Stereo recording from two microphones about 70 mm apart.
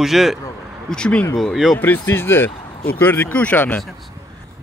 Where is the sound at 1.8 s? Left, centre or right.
Left.